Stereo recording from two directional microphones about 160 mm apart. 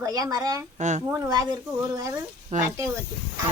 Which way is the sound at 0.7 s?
50° right (ahead or behind).